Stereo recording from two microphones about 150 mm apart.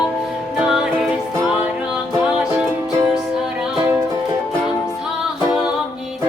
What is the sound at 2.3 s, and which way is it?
Music, 5° right (ahead or behind).